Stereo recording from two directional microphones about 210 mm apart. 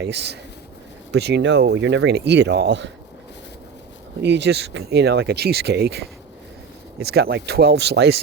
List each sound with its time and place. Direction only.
0.0 s speech: 55° right (ahead or behind)
4.2 s speech: 55° right (ahead or behind)